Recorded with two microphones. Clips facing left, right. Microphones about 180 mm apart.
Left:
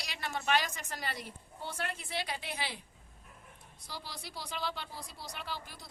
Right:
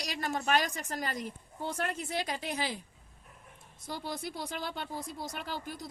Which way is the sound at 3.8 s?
50° right (ahead or behind).